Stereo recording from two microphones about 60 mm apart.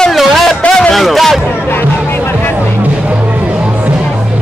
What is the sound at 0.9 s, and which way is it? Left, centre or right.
Speech, centre.